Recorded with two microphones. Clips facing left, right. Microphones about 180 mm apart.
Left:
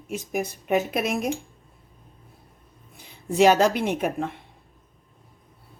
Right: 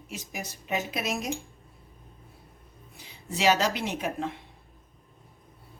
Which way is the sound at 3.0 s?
55° left (ahead or behind).